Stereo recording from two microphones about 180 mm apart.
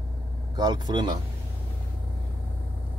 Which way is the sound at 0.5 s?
25° right (ahead or behind).